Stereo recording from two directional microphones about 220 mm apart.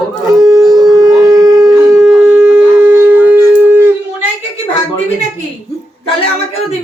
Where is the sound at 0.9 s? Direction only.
15° right (ahead or behind).